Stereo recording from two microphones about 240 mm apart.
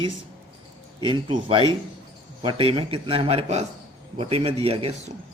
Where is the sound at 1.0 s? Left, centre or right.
Right.